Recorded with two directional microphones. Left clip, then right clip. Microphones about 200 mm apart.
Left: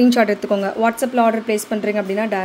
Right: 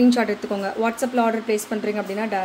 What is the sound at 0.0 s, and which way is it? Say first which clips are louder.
Speech: left 4 dB; 35° left (ahead or behind).